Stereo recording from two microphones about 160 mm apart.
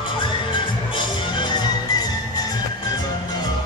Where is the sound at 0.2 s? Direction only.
30° left (ahead or behind).